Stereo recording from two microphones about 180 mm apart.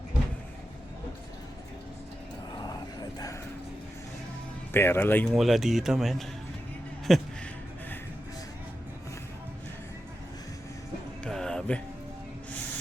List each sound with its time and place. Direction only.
2.6 s vehicle: 20° left (ahead or behind)
4.7 s speech: 10° left (ahead or behind)
5.3 s speech: centre (ahead or behind)
11.2 s music: 5° left (ahead or behind)